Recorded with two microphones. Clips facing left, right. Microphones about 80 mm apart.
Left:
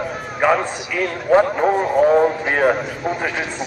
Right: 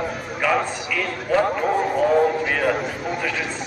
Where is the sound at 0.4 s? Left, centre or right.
Left.